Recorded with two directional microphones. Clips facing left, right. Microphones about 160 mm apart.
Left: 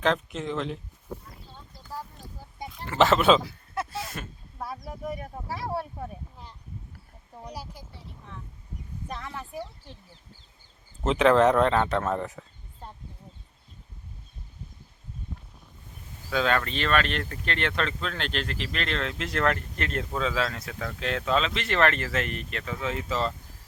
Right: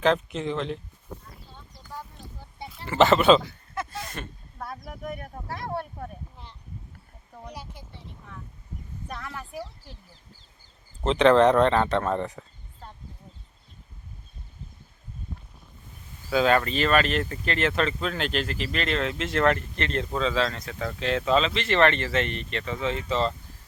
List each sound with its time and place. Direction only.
0.0 s speech: centre (ahead or behind)
1.7 s a sound: 5° left (ahead or behind)
5.2 s speech: 5° left (ahead or behind)
7.6 s speech: 40° left (ahead or behind)
7.9 s speech: centre (ahead or behind)
9.6 s speech: 5° right (ahead or behind)
11.0 s speech: 5° left (ahead or behind)
16.3 s speech: 5° right (ahead or behind)